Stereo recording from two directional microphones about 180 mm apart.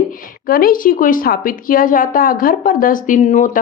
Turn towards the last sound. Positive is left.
turn(degrees=40)  # may be behind; listen again after turning